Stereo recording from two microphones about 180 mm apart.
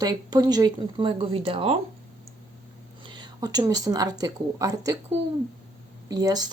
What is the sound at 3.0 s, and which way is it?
Speech, 25° right (ahead or behind).